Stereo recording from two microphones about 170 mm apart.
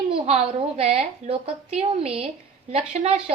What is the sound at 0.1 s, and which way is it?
A woman's voice, 35° right (ahead or behind).